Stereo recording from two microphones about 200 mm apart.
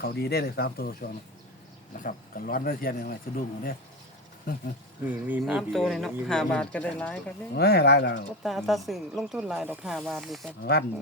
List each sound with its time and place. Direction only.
0.0 s speech: 55° left (ahead or behind)
2.0 s speech: 45° left (ahead or behind)
5.0 s speech: 10° right (ahead or behind)
7.5 s speech: 55° left (ahead or behind)
8.4 s speech: centre (ahead or behind)
10.6 s speech: 55° left (ahead or behind)